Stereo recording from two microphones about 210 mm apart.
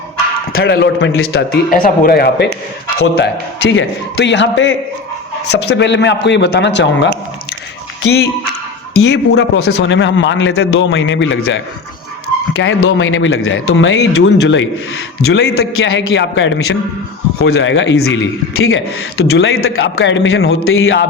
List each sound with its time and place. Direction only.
0.5 s a man's voice: 50° left (ahead or behind)
1.7 s a man's voice: 40° left (ahead or behind); by 7.1 s 55° left (ahead or behind)
9.0 s a man's voice: 55° left (ahead or behind)
15.5 s a man's voice: 70° left (ahead or behind)
19.6 s a man's voice: 80° left; by 20.6 s 55° left (ahead or behind)
20.7 s a man's voice: 70° left (ahead or behind)